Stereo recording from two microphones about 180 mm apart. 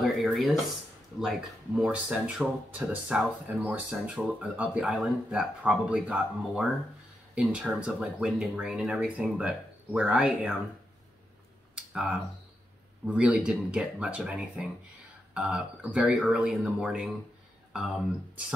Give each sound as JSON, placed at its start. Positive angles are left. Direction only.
{"t": 0.0, "sound": "speech", "side_deg": 0}
{"t": 11.7, "sound": "speech", "side_deg": -5}